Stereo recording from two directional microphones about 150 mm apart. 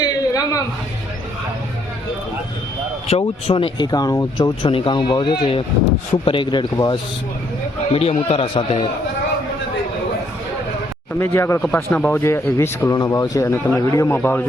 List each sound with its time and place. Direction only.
0.0 s a sound: 25° left (ahead or behind)
3.1 s speech: 35° left (ahead or behind)
7.9 s speech: 45° left (ahead or behind)
11.2 s speech: 15° left (ahead or behind)